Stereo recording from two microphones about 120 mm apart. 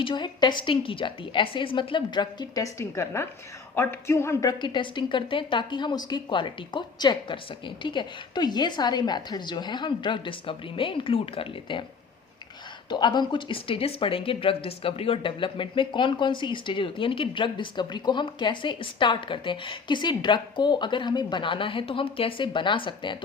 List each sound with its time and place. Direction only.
0.0 s speech: 40° left (ahead or behind)
2.7 s a woman's voice: 25° left (ahead or behind); by 11.9 s 45° left (ahead or behind)
12.9 s speech: 40° left (ahead or behind)